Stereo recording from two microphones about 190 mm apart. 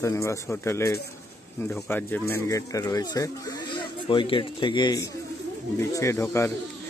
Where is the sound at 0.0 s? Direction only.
15° left (ahead or behind).